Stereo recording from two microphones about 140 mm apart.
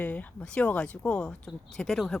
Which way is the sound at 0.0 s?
10° left (ahead or behind).